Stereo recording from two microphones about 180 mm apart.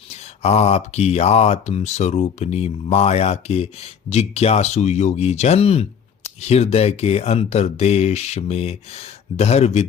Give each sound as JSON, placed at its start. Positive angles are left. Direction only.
{"t": 0.2, "sound": "speech", "side_deg": 35}